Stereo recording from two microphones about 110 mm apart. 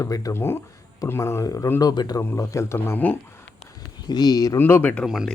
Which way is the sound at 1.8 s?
40° left (ahead or behind).